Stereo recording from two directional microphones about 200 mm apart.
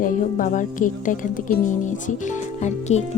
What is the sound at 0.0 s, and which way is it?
Speech, 40° left (ahead or behind).